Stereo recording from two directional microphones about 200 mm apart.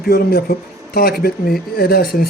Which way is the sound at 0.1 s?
50° left (ahead or behind).